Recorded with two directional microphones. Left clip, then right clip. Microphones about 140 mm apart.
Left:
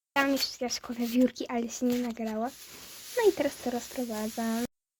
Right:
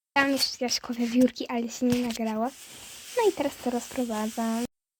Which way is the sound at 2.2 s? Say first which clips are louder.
Right 4 dB; 20° right (ahead or behind).